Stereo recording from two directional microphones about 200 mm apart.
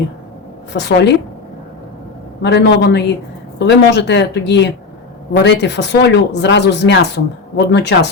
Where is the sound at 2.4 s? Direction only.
60° left (ahead or behind).